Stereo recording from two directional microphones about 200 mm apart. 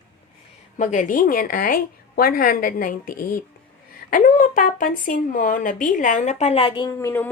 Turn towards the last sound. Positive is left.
turn(degrees=15)  # may be behind; listen again after turning